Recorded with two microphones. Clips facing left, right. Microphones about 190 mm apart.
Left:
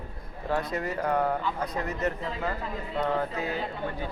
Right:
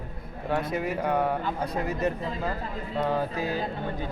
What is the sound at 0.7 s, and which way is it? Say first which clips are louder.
Speech: right 1 dB; 5° right (ahead or behind).